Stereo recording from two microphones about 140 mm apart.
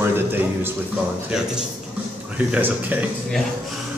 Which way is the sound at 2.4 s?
10° right (ahead or behind).